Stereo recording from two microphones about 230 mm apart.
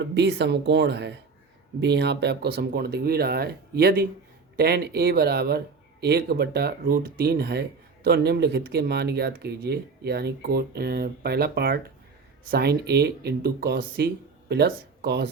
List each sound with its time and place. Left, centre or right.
0.0 s speech: right